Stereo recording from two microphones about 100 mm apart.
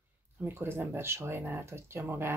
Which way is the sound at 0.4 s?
20° right (ahead or behind).